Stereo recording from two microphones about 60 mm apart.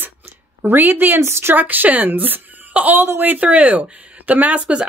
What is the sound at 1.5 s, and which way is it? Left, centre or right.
Speech, right.